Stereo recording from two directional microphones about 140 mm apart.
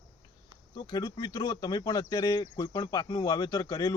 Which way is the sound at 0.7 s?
30° left (ahead or behind).